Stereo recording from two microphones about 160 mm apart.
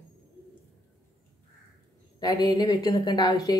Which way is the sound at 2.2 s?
25° left (ahead or behind).